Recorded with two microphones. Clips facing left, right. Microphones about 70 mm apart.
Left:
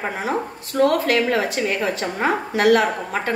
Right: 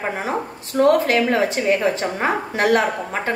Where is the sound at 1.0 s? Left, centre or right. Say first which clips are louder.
Right 1 dB; right.